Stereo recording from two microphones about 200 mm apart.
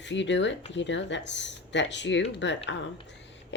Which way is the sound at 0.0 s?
65° left (ahead or behind).